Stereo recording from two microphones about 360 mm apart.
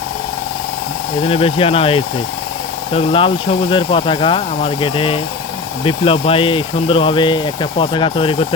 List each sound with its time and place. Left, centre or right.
1.2 s speech: centre